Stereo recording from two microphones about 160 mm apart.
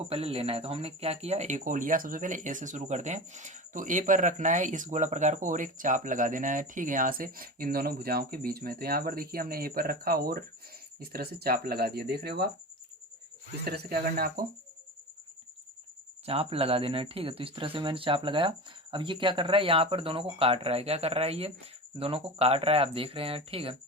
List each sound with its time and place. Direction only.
0.1 s speech: 35° right (ahead or behind); by 12.5 s 80° right
13.7 s speech: 75° right (ahead or behind)
16.2 s speech: 35° right (ahead or behind)